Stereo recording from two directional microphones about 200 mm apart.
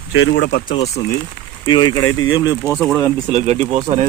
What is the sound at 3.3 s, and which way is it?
Speech, 35° right (ahead or behind).